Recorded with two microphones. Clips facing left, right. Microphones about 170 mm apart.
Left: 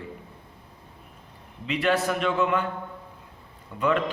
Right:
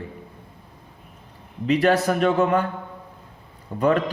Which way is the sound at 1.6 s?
40° right (ahead or behind).